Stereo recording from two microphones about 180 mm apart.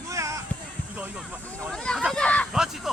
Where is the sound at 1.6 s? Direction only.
5° left (ahead or behind).